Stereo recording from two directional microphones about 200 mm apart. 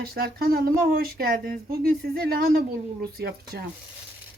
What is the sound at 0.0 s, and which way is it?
Speech, 50° right (ahead or behind).